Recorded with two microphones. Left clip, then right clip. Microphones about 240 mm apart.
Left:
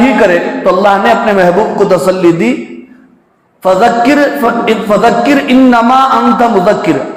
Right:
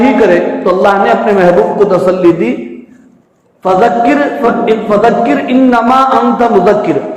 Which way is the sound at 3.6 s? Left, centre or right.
Left.